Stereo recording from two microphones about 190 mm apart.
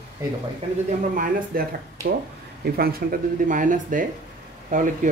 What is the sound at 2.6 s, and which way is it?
Speech, 50° right (ahead or behind).